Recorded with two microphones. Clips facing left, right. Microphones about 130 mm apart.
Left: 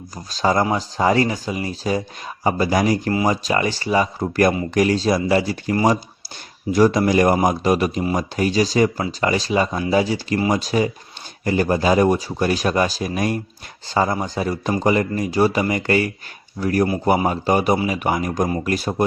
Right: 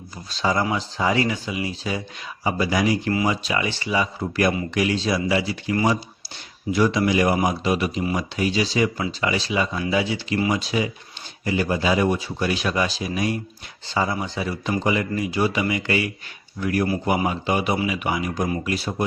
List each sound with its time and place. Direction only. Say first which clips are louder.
0.3 s speech: left 4 dB; 40° left (ahead or behind)